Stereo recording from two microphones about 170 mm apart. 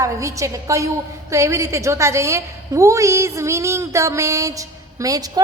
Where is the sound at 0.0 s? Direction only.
20° right (ahead or behind).